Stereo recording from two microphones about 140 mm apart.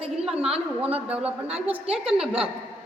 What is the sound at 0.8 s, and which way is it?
Speech, 10° right (ahead or behind).